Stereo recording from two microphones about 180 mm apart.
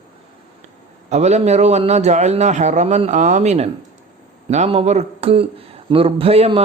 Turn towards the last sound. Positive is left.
turn(degrees=-35)  # may be behind; listen again after turning